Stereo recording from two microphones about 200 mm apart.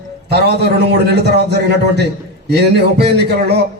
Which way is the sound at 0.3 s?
55° right (ahead or behind).